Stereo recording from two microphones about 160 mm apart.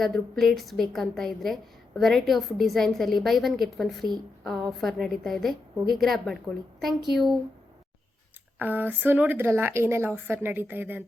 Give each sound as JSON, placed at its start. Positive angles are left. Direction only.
{"t": 0.0, "sound": "a woman's voice", "side_deg": 0}
{"t": 8.5, "sound": "speech", "side_deg": -10}